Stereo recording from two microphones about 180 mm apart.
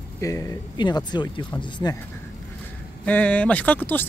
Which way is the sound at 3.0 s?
10° left (ahead or behind).